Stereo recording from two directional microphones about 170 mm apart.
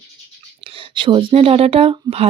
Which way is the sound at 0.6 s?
30° right (ahead or behind).